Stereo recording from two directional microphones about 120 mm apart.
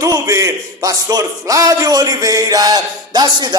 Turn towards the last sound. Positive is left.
turn(degrees=-35)  # may be behind; listen again after turning